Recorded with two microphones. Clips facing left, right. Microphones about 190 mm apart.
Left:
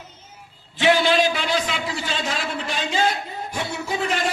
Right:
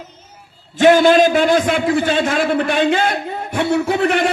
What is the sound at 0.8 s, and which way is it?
A man's voice, 45° right (ahead or behind).